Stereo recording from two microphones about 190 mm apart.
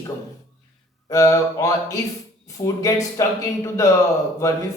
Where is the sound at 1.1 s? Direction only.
15° left (ahead or behind).